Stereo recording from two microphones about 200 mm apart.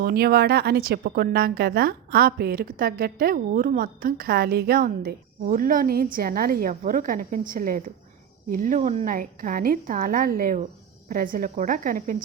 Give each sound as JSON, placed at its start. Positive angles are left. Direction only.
{"t": 0.0, "sound": "a woman's voice", "side_deg": -50}